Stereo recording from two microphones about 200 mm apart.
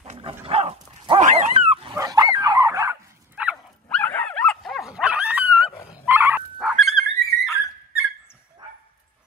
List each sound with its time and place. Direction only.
0.0 s dog: 30° right (ahead or behind)
2.0 s dog: 15° right (ahead or behind)
3.9 s dog: 10° left (ahead or behind)